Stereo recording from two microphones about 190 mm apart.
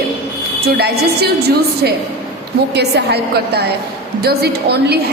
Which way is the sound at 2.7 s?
60° right (ahead or behind).